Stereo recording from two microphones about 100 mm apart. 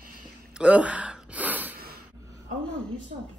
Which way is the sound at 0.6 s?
15° right (ahead or behind).